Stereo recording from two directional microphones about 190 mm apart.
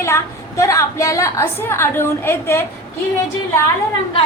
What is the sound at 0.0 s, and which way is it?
A woman's voice, 15° left (ahead or behind).